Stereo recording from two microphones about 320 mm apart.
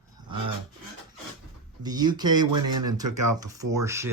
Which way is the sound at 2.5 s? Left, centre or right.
Right.